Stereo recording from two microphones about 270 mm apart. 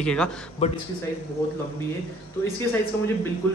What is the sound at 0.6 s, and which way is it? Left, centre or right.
Speech, left.